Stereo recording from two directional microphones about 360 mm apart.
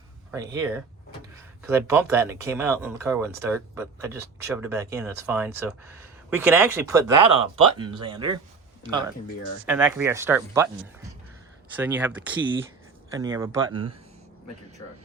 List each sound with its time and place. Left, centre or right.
0.3 s speech: centre
11.8 s speech: centre